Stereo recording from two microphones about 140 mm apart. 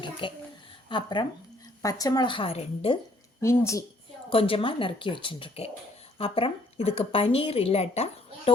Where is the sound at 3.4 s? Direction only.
20° left (ahead or behind).